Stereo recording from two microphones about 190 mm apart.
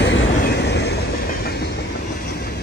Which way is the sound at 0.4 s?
60° left (ahead or behind).